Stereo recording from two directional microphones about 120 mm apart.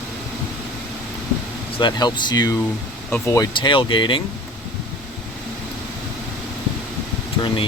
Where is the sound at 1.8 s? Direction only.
35° left (ahead or behind).